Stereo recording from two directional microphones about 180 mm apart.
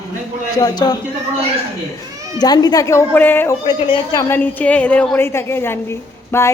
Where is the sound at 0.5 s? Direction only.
20° left (ahead or behind).